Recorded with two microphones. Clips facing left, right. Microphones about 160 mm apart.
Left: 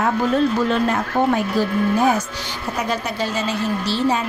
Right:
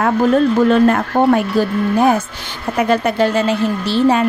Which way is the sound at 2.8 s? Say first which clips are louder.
Right 10 dB; 60° right (ahead or behind).